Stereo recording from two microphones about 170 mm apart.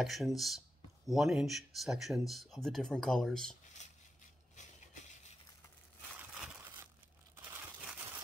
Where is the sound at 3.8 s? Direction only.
45° left (ahead or behind).